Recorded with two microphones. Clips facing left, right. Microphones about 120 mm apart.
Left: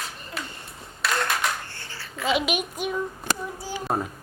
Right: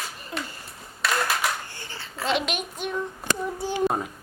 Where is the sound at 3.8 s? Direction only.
Centre (ahead or behind).